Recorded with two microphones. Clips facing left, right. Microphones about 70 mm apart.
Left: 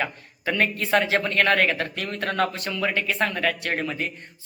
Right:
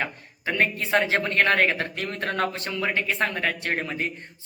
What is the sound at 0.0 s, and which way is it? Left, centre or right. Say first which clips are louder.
A man's voice: left 2 dB; right.